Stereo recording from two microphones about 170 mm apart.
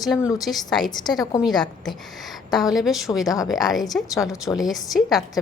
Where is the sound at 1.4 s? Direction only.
Centre (ahead or behind).